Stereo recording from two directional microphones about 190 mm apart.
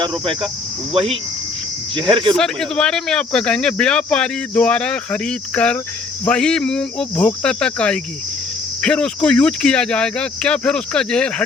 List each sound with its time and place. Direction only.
0.0 s speech: 25° right (ahead or behind)
2.3 s speech: 5° left (ahead or behind)